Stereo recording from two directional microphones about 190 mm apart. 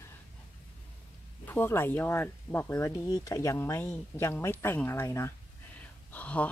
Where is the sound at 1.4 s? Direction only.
10° left (ahead or behind).